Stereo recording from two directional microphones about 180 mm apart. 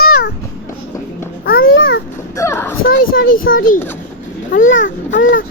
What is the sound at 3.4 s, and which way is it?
Speech, 90° left.